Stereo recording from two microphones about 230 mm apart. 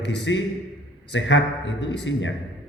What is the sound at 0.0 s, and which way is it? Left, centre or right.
A woman's voice, left.